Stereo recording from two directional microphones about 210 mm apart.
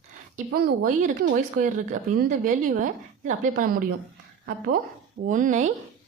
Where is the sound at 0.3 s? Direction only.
40° right (ahead or behind).